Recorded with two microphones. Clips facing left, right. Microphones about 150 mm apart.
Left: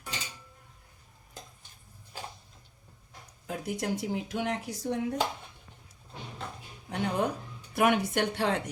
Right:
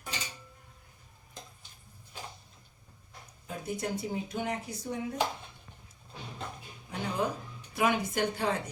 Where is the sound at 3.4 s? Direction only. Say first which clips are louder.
Left 2 dB; 90° left.